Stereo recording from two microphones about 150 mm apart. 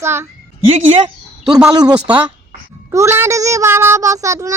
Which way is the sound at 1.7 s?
25° right (ahead or behind).